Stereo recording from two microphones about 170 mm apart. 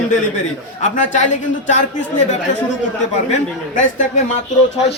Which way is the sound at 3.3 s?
45° left (ahead or behind).